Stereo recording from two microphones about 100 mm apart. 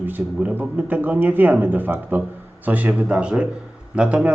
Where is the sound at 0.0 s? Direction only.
15° right (ahead or behind).